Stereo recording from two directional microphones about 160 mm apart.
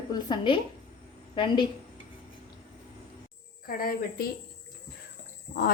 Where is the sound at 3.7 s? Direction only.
65° left (ahead or behind).